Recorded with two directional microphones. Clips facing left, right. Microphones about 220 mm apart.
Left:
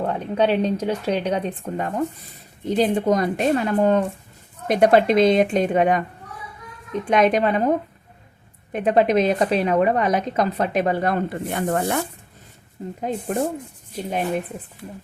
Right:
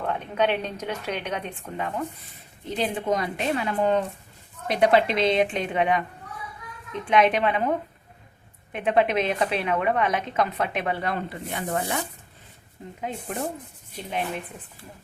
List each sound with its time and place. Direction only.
0.0 s a woman's voice: 35° left (ahead or behind)